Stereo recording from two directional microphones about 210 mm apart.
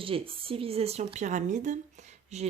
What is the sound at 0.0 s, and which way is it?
Speech, 25° right (ahead or behind).